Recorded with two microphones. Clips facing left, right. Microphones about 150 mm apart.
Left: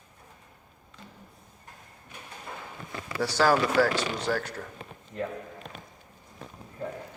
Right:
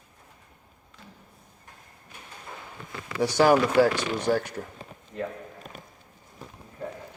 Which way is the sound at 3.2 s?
20° right (ahead or behind).